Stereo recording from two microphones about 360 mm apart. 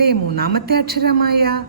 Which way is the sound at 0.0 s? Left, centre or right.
Right.